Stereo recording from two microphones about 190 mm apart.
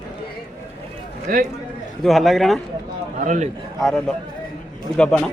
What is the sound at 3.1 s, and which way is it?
Speech, 40° right (ahead or behind).